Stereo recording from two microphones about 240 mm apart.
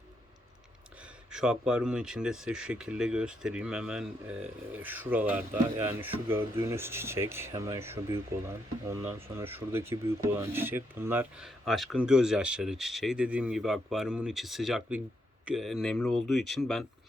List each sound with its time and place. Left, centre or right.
1.3 s speech: centre